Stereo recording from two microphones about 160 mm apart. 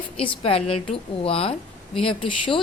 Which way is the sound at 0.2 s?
35° left (ahead or behind).